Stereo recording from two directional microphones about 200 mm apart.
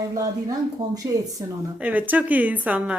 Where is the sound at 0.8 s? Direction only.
15° right (ahead or behind).